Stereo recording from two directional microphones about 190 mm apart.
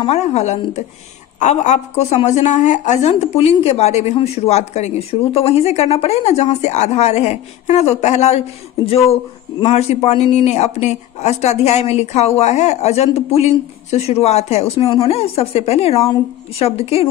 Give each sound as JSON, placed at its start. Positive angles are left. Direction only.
{"t": 0.0, "sound": "a woman's voice", "side_deg": 35}